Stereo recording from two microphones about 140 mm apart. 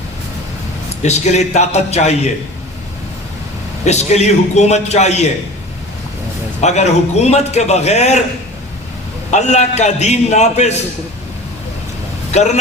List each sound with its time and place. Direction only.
1.0 s a man's voice: 55° left (ahead or behind)
3.8 s a man's voice: 50° left (ahead or behind)
6.6 s a man's voice: 55° left (ahead or behind)
9.3 s a man's voice: 55° left (ahead or behind)
12.3 s a man's voice: 55° left (ahead or behind)